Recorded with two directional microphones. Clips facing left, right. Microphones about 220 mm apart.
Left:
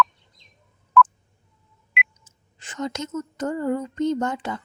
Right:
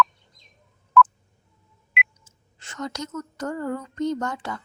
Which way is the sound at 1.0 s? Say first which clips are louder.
Even; centre (ahead or behind).